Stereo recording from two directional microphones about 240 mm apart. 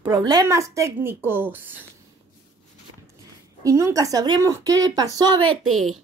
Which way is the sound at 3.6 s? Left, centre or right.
Centre.